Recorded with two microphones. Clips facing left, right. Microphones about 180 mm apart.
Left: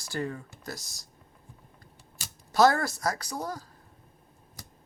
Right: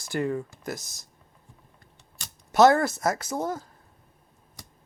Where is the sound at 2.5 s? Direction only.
20° right (ahead or behind).